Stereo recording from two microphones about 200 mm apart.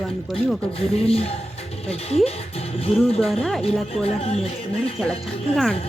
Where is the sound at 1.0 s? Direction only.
30° left (ahead or behind).